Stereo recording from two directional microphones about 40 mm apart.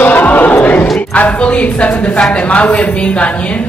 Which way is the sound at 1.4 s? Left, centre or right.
Left.